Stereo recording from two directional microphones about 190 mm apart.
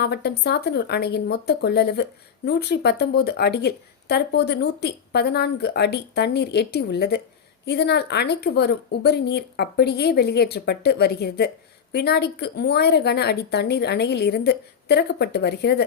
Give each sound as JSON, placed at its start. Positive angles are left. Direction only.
{"t": 0.0, "sound": "speech", "side_deg": 60}